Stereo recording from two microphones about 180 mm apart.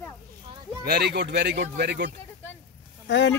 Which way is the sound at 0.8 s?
65° right (ahead or behind).